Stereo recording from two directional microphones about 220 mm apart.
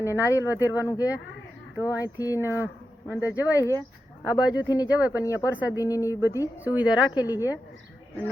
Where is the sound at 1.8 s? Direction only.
15° left (ahead or behind).